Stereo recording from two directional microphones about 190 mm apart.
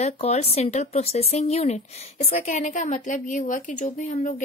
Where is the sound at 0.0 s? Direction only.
35° left (ahead or behind).